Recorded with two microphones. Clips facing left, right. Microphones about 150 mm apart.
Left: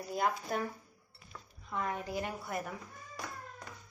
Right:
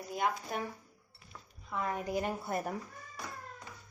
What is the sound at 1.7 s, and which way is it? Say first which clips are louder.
Speech: right 1 dB; 5° right (ahead or behind).